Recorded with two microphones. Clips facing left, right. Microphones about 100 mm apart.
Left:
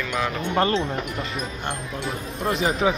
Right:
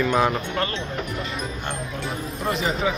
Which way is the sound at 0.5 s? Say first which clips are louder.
Left 5 dB; 30° left (ahead or behind).